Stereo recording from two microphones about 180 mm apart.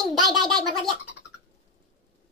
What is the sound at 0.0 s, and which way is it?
Gargling, centre (ahead or behind).